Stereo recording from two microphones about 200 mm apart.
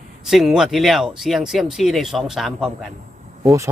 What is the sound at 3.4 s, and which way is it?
Speech, 15° right (ahead or behind).